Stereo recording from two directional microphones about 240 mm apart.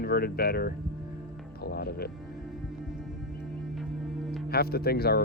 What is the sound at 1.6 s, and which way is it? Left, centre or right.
Music, left.